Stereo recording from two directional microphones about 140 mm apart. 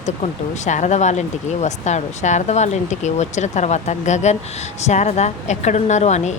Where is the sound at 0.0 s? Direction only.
55° left (ahead or behind).